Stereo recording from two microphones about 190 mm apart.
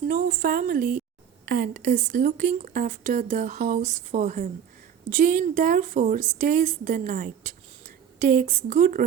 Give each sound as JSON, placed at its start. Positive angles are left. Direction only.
{"t": 0.1, "sound": "speech", "side_deg": -45}